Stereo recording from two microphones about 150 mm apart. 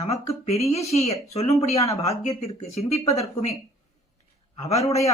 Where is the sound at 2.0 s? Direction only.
45° left (ahead or behind).